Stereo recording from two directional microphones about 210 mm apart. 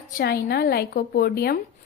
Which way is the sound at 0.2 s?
50° left (ahead or behind).